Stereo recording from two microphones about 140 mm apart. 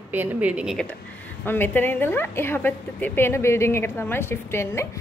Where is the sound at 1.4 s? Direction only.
15° left (ahead or behind).